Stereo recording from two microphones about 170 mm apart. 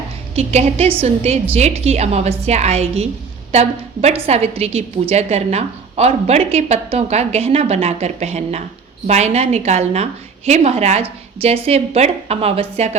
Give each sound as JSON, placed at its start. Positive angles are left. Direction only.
{"t": 0.3, "sound": "a woman's voice", "side_deg": -40}